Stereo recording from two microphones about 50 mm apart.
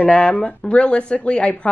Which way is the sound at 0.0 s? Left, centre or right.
Left.